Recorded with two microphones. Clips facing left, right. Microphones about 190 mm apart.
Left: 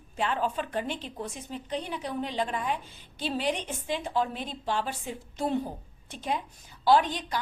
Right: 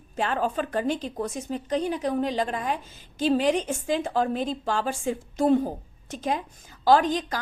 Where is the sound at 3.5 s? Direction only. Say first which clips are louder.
Right 6 dB; 90° right.